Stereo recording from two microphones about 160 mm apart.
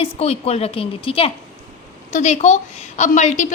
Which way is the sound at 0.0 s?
40° left (ahead or behind).